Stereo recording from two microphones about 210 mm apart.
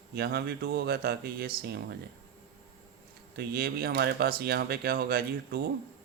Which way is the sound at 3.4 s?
45° right (ahead or behind).